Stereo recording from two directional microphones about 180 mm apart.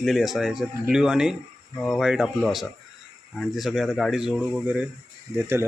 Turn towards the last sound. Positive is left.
turn(degrees=-15)  # may be behind; listen again after turning